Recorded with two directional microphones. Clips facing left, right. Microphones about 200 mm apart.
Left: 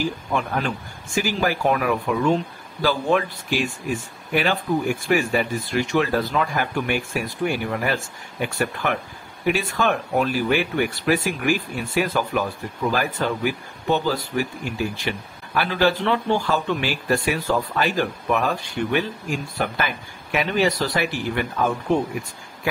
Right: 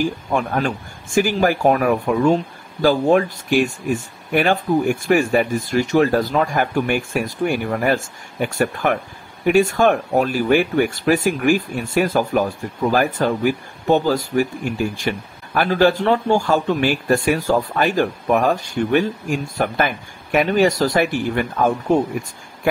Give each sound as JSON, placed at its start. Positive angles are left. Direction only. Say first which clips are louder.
{"t": 0.0, "sound": "speech", "louder": "right 4 dB", "side_deg": -45}